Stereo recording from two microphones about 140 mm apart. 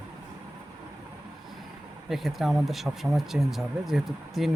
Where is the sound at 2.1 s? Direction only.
Centre (ahead or behind).